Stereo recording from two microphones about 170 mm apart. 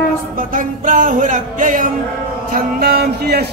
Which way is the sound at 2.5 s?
65° right (ahead or behind).